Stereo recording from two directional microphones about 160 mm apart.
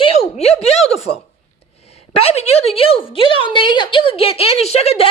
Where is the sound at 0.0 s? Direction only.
40° left (ahead or behind).